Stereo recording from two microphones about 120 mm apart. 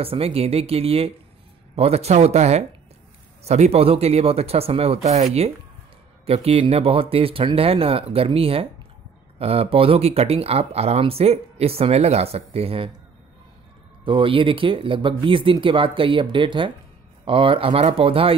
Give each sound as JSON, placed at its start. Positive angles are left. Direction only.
{"t": 0.0, "sound": "speech", "side_deg": -55}
{"t": 14.0, "sound": "speech", "side_deg": -45}